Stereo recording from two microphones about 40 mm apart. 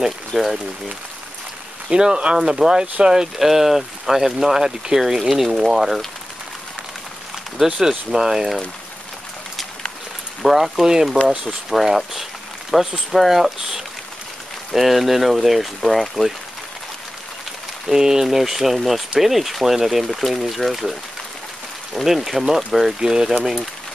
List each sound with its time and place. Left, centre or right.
0.3 s speech: centre
1.9 s speech: right
3.3 s speech: centre
7.5 s speech: centre
10.4 s speech: centre
17.8 s speech: centre
21.9 s speech: centre